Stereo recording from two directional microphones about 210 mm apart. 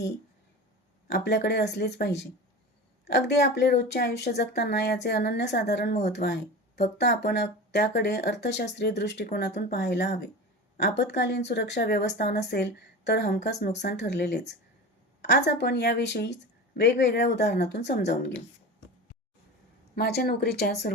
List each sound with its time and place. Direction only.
1.1 s a woman's voice: 50° left (ahead or behind)
20.0 s a woman's voice: 50° left (ahead or behind)